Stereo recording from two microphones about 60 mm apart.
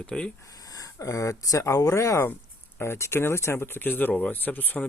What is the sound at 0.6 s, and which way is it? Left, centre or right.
Speech, left.